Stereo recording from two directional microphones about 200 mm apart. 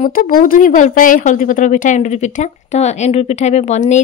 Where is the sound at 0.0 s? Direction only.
45° left (ahead or behind).